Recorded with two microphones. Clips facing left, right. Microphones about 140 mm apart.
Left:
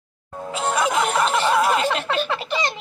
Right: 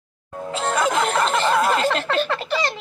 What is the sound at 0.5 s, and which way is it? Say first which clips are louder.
Music: even; 30° right (ahead or behind).